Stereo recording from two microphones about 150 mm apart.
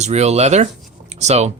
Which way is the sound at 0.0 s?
45° right (ahead or behind).